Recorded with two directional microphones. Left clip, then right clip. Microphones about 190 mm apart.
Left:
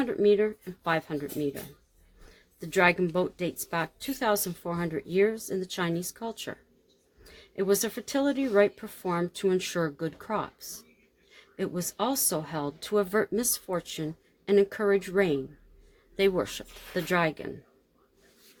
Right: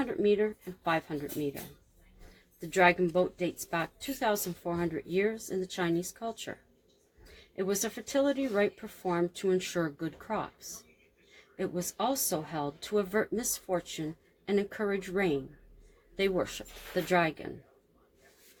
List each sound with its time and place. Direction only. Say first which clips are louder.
0.0 s speech: left 4 dB; 55° left (ahead or behind)
2.6 s a woman's voice: left 1 dB; 55° left (ahead or behind)
11.5 s a woman's voice: left 2 dB; 55° left (ahead or behind)